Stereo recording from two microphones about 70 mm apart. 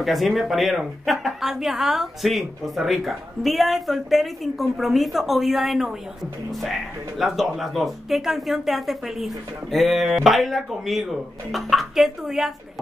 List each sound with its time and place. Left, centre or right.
0.0 s speech: centre